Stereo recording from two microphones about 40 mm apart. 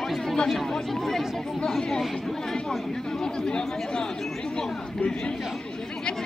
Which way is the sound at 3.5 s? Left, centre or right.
Left.